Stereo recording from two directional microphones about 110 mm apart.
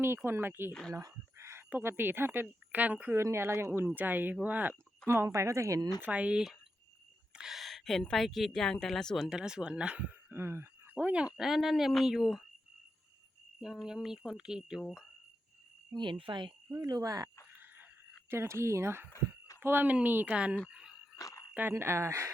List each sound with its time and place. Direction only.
0.3 s speech: 20° right (ahead or behind)
0.7 s speech: 5° left (ahead or behind)
0.9 s a sound: 25° right (ahead or behind)
1.7 s speech: 20° right (ahead or behind)
3.2 s speech: 25° right (ahead or behind)
5.0 s speech: 25° right (ahead or behind)
6.0 s a woman's voice: 10° right (ahead or behind)
13.6 s speech: 5° right (ahead or behind)
16.0 s speech: 50° right (ahead or behind)
16.7 s speech: 35° right (ahead or behind)
18.3 s speech: 25° right (ahead or behind)
21.2 s jingle bell: 30° left (ahead or behind)
21.5 s speech: 20° right (ahead or behind)